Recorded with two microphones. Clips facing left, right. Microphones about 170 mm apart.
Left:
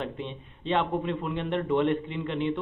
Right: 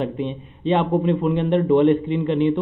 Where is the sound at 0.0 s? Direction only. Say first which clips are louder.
Right 9 dB; 15° right (ahead or behind).